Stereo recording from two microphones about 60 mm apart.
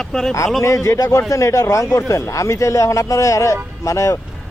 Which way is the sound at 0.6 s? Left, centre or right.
Left.